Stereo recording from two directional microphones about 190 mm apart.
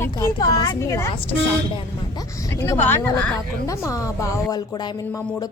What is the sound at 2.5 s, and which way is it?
A woman's voice, 15° left (ahead or behind).